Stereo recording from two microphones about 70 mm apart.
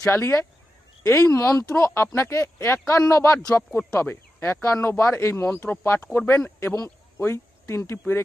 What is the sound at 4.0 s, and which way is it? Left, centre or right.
Speech, left.